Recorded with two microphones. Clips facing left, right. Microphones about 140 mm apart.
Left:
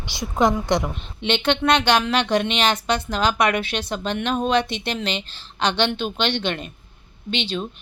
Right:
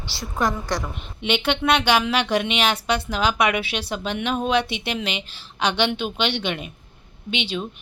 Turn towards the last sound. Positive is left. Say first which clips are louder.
# left 1 dB
turn(degrees=-10)  # may be behind; listen again after turning